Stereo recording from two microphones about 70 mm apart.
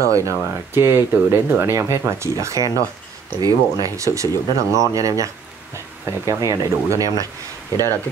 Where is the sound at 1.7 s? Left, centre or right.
Right.